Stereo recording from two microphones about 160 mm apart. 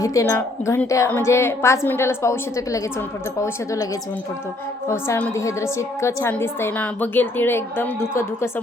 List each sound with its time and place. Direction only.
0.0 s a woman's voice: 20° left (ahead or behind)
4.9 s a woman's voice: 15° left (ahead or behind)